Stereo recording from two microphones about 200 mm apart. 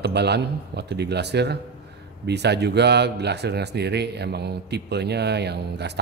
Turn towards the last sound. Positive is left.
turn(degrees=-55)  # may be behind; listen again after turning